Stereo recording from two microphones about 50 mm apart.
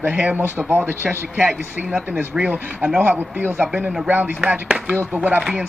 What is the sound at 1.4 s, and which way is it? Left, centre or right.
Speech, right.